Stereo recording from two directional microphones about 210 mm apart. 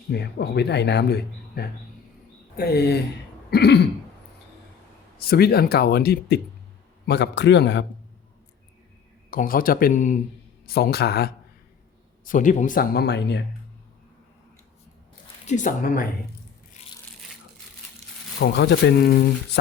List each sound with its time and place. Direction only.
0.1 s speech: 50° left (ahead or behind)
3.5 s throat clearing: 50° left (ahead or behind)
5.2 s a man's voice: 45° left (ahead or behind)
9.3 s speech: 40° left (ahead or behind)
10.7 s speech: 50° left (ahead or behind)
12.2 s speech: 40° left (ahead or behind); by 13.4 s 55° left (ahead or behind)
15.4 s speech: 35° left (ahead or behind)
18.3 s speech: 55° left (ahead or behind)